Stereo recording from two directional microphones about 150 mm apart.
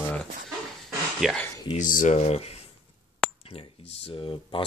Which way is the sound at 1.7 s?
60° left (ahead or behind).